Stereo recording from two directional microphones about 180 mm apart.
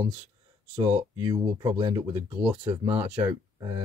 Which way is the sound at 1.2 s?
25° right (ahead or behind).